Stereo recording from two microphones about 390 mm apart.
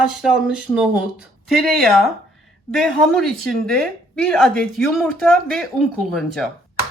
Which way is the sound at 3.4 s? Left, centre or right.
Centre.